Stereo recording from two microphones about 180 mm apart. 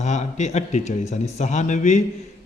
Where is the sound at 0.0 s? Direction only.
40° left (ahead or behind).